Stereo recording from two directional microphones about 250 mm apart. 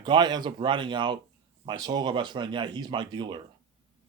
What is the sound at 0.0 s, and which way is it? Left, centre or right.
Speech, centre.